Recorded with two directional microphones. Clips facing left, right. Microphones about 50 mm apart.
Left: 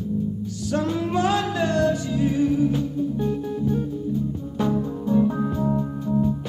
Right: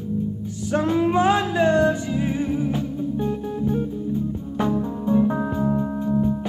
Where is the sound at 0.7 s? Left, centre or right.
Right.